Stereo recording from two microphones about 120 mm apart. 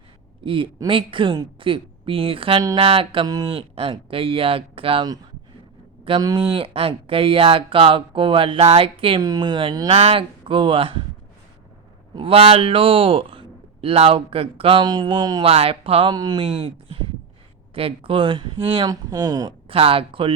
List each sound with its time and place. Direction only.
0.4 s speech: 45° right (ahead or behind)
3.2 s speech: 30° right (ahead or behind)
3.5 s speech: 50° right (ahead or behind)
6.1 s speech: 45° right (ahead or behind)
9.2 s speech: 35° right (ahead or behind)
9.9 s speech: 60° right (ahead or behind)
12.1 s speech: 50° right (ahead or behind)
14.8 s speech: 35° right (ahead or behind)
15.4 s speech: 55° right (ahead or behind)
16.1 s speech: 35° right (ahead or behind)
17.7 s speech: 50° right (ahead or behind)
18.9 s speech: 30° right (ahead or behind)
19.6 s speech: 50° right (ahead or behind)